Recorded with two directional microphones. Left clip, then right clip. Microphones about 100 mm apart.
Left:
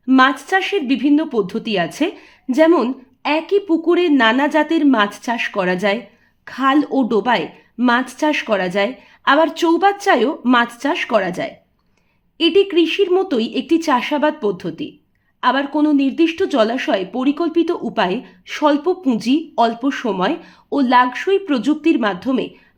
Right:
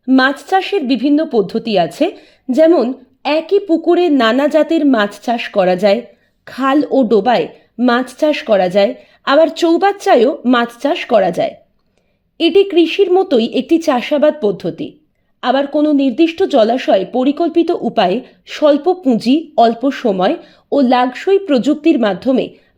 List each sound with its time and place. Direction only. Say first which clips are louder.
0.2 s a woman's voice: even; 30° right (ahead or behind)
4.2 s a woman's voice: right 3 dB; 40° right (ahead or behind)
6.7 s speech: right 5 dB; 25° right (ahead or behind)
11.2 s speech: right 8 dB; 50° right (ahead or behind)
12.4 s speech: right 3 dB; 40° right (ahead or behind)
18.4 s speech: right 5 dB; 35° right (ahead or behind)